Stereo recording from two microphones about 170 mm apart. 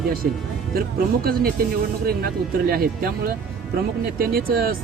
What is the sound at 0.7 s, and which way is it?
Speech, 60° right (ahead or behind).